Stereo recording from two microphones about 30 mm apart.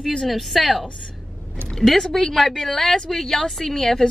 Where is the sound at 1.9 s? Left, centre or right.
Centre.